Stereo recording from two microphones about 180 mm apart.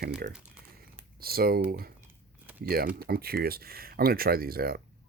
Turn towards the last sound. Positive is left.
turn(degrees=-55)  # may be behind; listen again after turning